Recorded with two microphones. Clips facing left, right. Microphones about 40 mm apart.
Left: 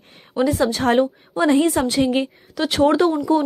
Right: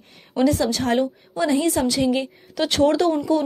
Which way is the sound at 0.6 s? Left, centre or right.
Left.